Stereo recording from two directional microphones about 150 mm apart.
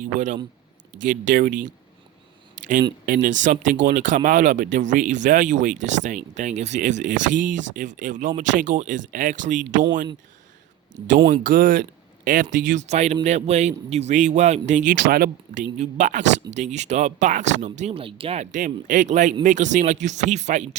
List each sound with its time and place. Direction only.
0.0 s speech: 55° right (ahead or behind)
3.1 s speech: 60° right (ahead or behind)
11.3 s speech: 70° right (ahead or behind)
12.9 s speech: 50° right (ahead or behind)
15.1 s speech: 85° right
15.8 s speech: 55° right (ahead or behind); by 18.4 s 40° right (ahead or behind)
18.5 s speech: 60° right (ahead or behind)